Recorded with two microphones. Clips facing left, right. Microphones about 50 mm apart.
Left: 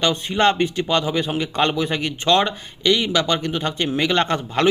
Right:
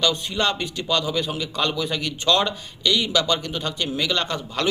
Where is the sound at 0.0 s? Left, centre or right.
Left.